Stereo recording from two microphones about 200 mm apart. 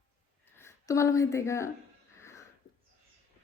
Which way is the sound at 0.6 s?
15° left (ahead or behind).